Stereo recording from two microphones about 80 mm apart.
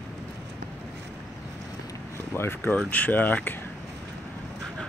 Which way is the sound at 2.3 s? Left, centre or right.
Left.